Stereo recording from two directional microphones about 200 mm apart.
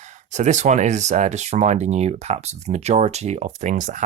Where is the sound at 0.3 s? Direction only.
35° right (ahead or behind).